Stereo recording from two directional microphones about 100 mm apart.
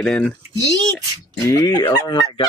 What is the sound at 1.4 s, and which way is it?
Speech, 35° left (ahead or behind).